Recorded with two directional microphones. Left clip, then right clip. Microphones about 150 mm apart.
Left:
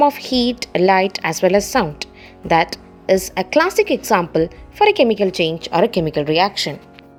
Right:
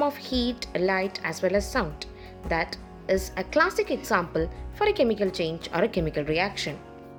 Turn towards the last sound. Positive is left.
turn(degrees=35)  # may be behind; listen again after turning